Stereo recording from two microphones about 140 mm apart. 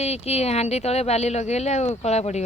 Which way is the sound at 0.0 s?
50° left (ahead or behind).